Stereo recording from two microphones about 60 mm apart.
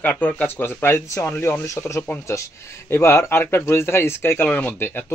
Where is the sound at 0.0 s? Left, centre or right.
Left.